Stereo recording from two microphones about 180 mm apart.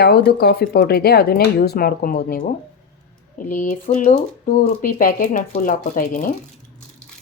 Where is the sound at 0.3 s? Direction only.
60° left (ahead or behind).